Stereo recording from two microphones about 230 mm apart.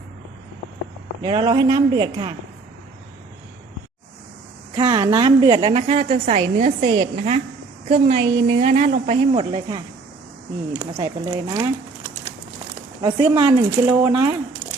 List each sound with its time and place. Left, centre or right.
1.2 s a man's voice: centre
4.8 s a woman's voice: centre
5.9 s a woman's voice: right
8.1 s speech: centre
8.5 s a man's voice: right; by 11.7 s centre
13.0 s speech: centre